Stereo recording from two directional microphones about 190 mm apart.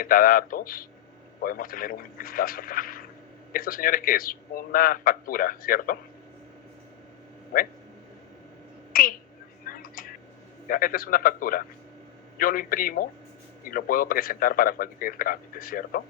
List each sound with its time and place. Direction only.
0.0 s a man's voice: 50° left (ahead or behind)
8.9 s a woman's voice: 50° left (ahead or behind)
9.6 s a sound: 50° left (ahead or behind)
10.7 s a man's voice: 50° left (ahead or behind)